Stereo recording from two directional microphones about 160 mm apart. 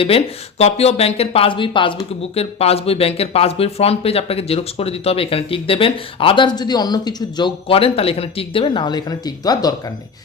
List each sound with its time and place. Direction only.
0.6 s speech: 40° left (ahead or behind); by 9.9 s 25° left (ahead or behind)